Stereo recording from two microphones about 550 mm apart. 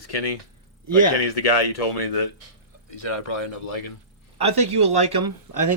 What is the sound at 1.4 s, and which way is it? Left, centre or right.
Speech, left.